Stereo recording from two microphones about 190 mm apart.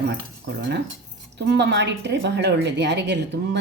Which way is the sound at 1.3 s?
65° right (ahead or behind).